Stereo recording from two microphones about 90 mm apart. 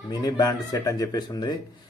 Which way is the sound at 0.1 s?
45° left (ahead or behind).